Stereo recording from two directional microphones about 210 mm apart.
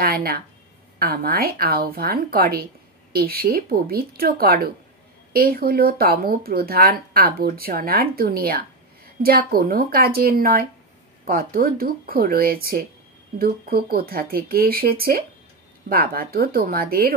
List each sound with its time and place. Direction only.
0.0 s speech: 45° right (ahead or behind)